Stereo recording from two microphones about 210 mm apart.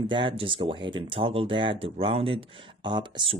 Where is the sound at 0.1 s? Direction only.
25° right (ahead or behind).